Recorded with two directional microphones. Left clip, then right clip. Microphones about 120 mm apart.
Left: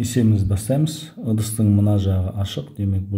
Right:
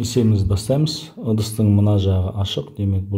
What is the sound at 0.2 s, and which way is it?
Speech, 25° right (ahead or behind).